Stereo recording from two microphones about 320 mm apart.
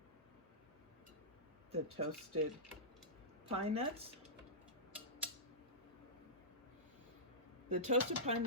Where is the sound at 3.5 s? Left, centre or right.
Centre.